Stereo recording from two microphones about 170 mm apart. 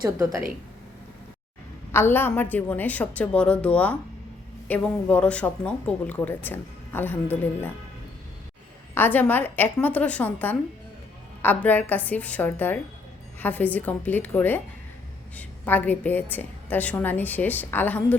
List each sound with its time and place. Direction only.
0.0 s a woman's voice: 20° right (ahead or behind)
1.9 s speech: 15° left (ahead or behind)
9.0 s speech: 10° left (ahead or behind)